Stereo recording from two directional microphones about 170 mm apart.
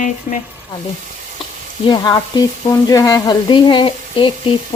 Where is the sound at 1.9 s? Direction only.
25° left (ahead or behind).